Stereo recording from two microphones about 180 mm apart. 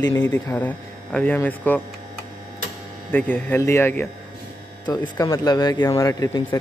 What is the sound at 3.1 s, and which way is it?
Speech, 10° left (ahead or behind).